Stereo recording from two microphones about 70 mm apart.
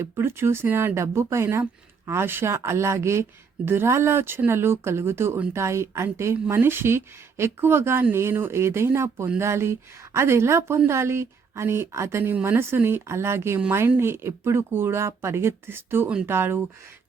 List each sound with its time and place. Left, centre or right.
0.0 s speech: right